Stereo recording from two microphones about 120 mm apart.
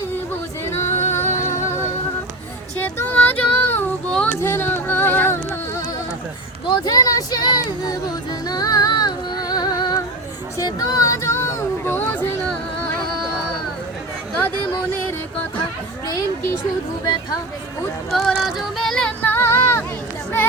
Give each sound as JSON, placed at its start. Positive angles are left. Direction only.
{"t": 0.6, "sound": "female singing", "side_deg": 20}
{"t": 1.1, "sound": "music", "side_deg": 20}
{"t": 2.7, "sound": "child singing", "side_deg": 15}
{"t": 4.4, "sound": "a sound", "side_deg": 20}
{"t": 6.7, "sound": "speech", "side_deg": 35}
{"t": 8.4, "sound": "music", "side_deg": 30}
{"t": 10.6, "sound": "a sound", "side_deg": 30}
{"t": 13.1, "sound": "a sound", "side_deg": 0}
{"t": 18.1, "sound": "music", "side_deg": 5}
{"t": 19.2, "sound": "speech", "side_deg": 20}